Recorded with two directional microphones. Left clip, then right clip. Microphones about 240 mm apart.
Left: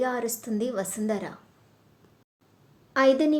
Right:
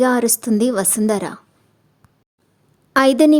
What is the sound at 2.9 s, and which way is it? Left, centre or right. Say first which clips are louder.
Speech: right 8 dB; right.